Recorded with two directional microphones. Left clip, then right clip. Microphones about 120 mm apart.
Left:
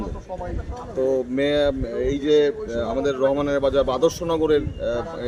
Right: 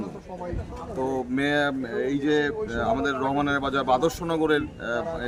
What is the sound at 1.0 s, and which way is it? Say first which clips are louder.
Speech: left 5 dB; 40° right (ahead or behind).